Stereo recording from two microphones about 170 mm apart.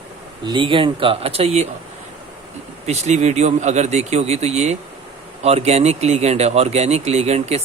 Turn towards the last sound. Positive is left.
turn(degrees=-40)  # may be behind; listen again after turning